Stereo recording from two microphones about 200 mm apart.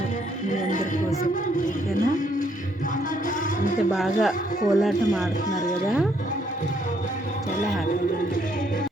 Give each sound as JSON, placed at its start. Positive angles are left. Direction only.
{"t": 3.9, "sound": "speech", "side_deg": 0}